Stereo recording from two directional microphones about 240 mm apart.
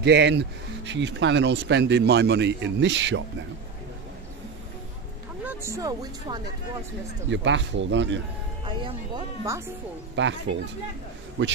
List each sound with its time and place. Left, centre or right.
0.0 s speech: right
5.4 s speech: centre
7.2 s speech: right
8.6 s speech: centre
10.1 s speech: right